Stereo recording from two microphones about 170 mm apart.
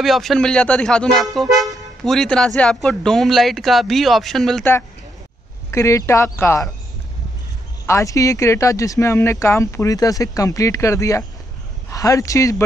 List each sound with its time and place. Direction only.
0.0 s speech: centre (ahead or behind)
5.7 s speech: 15° left (ahead or behind)
7.8 s a man's voice: 15° left (ahead or behind)